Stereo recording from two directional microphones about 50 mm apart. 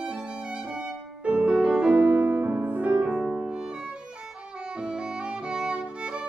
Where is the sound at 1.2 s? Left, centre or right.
Right.